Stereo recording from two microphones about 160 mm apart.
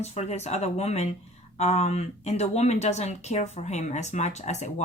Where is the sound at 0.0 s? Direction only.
45° left (ahead or behind).